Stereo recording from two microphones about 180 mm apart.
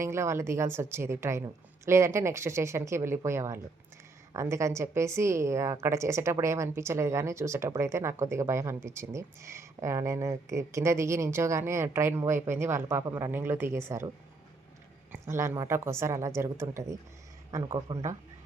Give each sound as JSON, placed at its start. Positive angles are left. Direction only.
{"t": 0.0, "sound": "a woman's voice", "side_deg": -15}
{"t": 15.1, "sound": "a woman's voice", "side_deg": -15}
{"t": 17.7, "sound": "speech", "side_deg": -30}